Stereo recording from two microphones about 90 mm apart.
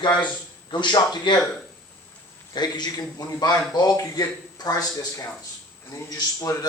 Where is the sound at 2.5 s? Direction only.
50° left (ahead or behind).